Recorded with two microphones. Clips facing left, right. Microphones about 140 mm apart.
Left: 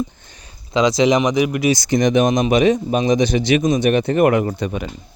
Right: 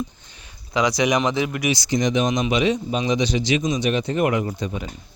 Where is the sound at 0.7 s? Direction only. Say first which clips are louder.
Left 5 dB; 25° left (ahead or behind).